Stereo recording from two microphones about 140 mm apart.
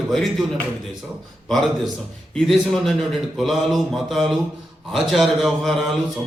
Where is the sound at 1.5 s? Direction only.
Centre (ahead or behind).